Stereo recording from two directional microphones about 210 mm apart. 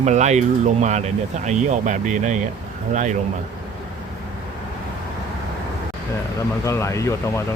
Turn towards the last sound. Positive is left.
turn(degrees=15)  # may be behind; listen again after turning